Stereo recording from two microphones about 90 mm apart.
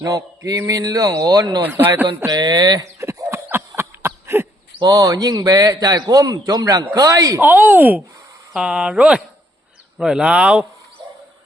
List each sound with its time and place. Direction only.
0.0 s mantra: 40° right (ahead or behind)
0.7 s a man's voice: 40° right (ahead or behind)
1.6 s speech: 20° right (ahead or behind)
2.2 s a man's voice: 50° right (ahead or behind)
3.0 s a sound: 30° right (ahead or behind)
4.8 s a man's voice: 45° right (ahead or behind)
7.3 s speech: 20° right (ahead or behind)